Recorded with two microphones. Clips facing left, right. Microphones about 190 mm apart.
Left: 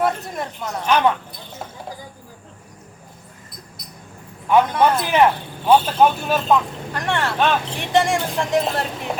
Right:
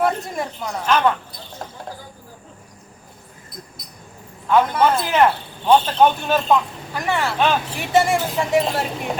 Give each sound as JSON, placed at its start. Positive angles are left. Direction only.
{"t": 0.0, "sound": "a woman's voice", "side_deg": 0}
{"t": 0.9, "sound": "speech", "side_deg": 10}
{"t": 4.8, "sound": "speech", "side_deg": 15}